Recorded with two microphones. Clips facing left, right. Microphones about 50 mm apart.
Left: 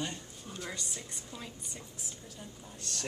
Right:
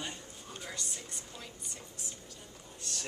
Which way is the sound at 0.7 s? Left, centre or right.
Centre.